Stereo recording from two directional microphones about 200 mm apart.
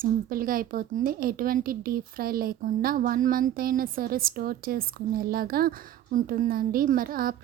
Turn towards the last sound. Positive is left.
turn(degrees=-45)  # may be behind; listen again after turning